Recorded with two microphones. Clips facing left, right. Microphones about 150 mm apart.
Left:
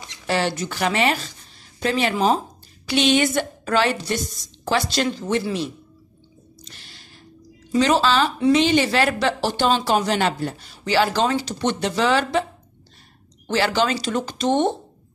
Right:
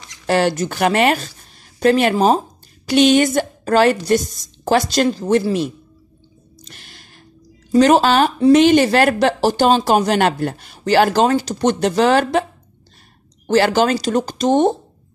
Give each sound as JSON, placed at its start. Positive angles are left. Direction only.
{"t": 0.3, "sound": "speech", "side_deg": -45}
{"t": 6.7, "sound": "music", "side_deg": -55}
{"t": 7.7, "sound": "speech", "side_deg": -50}
{"t": 13.5, "sound": "speech", "side_deg": -45}